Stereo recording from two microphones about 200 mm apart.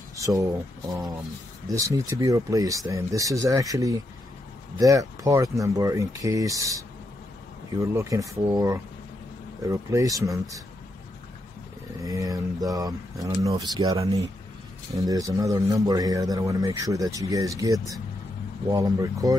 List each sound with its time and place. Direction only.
0.1 s a man's voice: 15° right (ahead or behind)
7.8 s a man's voice: 15° right (ahead or behind)
12.0 s a man's voice: 15° right (ahead or behind)